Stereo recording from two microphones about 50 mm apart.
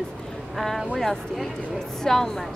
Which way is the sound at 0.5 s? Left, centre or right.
Centre.